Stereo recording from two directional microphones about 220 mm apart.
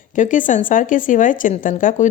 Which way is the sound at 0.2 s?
35° left (ahead or behind).